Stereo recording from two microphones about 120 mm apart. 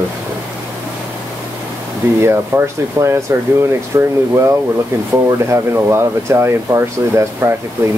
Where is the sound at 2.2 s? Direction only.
20° right (ahead or behind).